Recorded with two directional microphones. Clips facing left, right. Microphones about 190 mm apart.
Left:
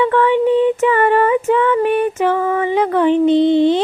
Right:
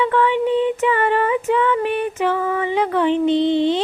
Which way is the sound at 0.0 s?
45° left (ahead or behind).